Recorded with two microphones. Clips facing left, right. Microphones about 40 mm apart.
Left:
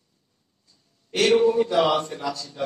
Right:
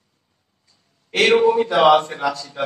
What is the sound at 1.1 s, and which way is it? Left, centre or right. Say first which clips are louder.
A man's voice: right 4 dB; right.